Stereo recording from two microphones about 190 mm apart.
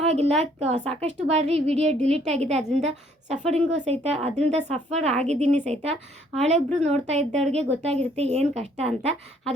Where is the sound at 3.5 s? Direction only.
35° right (ahead or behind).